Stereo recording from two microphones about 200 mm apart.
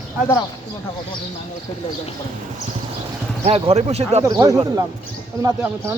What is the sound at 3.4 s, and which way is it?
Speech, 30° right (ahead or behind).